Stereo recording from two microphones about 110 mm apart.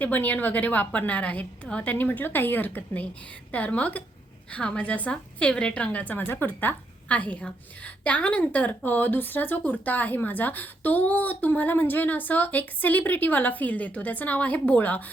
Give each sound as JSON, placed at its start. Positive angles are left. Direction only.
{"t": 0.0, "sound": "a woman's voice", "side_deg": 15}